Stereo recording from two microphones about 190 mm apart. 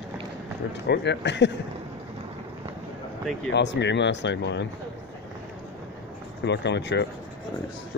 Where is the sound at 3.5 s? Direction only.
65° left (ahead or behind).